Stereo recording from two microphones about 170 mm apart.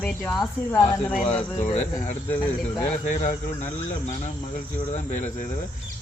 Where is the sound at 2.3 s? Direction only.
10° left (ahead or behind).